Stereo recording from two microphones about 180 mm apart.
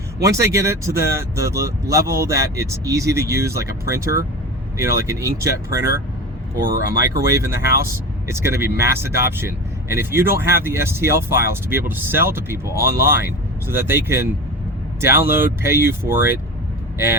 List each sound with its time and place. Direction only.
0.2 s speech: 15° right (ahead or behind)
7.0 s speech: 15° right (ahead or behind)